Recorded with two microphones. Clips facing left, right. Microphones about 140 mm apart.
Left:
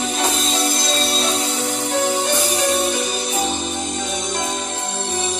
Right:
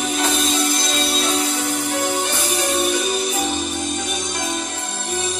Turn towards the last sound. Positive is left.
turn(degrees=25)  # may be behind; listen again after turning